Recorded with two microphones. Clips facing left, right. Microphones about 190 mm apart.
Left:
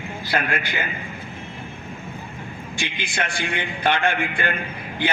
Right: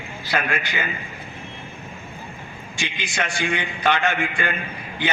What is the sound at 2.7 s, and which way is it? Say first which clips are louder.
A man's voice: even; 55° left (ahead or behind).